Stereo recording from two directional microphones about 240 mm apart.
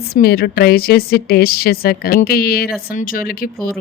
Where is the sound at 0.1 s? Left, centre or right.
Left.